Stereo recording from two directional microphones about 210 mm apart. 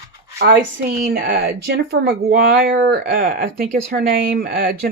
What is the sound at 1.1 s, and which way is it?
Speech, 50° right (ahead or behind).